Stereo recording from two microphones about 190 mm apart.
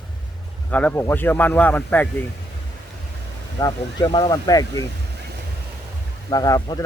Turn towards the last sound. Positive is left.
turn(degrees=20)  # may be behind; listen again after turning